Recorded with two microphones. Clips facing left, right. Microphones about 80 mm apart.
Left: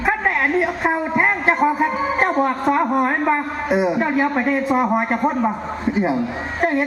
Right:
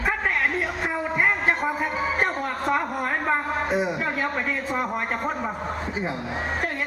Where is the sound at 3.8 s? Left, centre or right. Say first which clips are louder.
Left 7 dB; left.